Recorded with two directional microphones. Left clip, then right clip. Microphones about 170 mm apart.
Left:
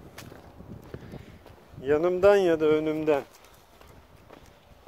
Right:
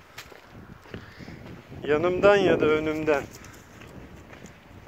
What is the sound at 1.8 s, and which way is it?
Speech, 25° left (ahead or behind).